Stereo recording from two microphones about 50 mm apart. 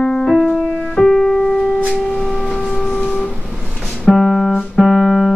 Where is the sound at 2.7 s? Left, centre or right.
Centre.